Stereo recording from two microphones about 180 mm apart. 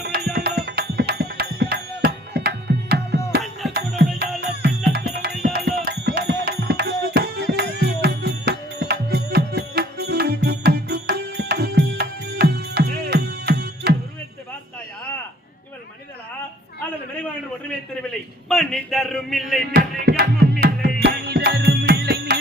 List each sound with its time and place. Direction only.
0.3 s music: 65° right (ahead or behind)
18.4 s a sound: 5° left (ahead or behind)
19.7 s music: 60° right (ahead or behind)